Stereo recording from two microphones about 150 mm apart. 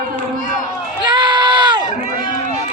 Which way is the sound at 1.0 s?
30° right (ahead or behind).